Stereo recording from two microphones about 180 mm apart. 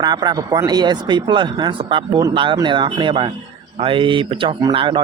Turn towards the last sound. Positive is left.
turn(degrees=-30)  # may be behind; listen again after turning